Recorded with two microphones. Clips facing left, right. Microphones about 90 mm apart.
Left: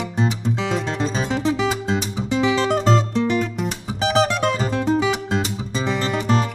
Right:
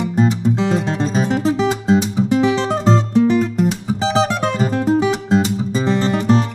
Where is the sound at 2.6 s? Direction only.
20° right (ahead or behind).